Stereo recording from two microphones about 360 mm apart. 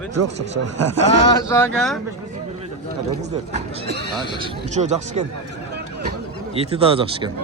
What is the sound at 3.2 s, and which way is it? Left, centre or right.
Speech, centre.